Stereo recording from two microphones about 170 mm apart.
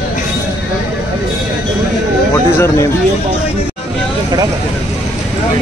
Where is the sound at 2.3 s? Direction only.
15° left (ahead or behind).